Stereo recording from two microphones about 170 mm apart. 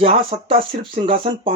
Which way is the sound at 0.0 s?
35° right (ahead or behind).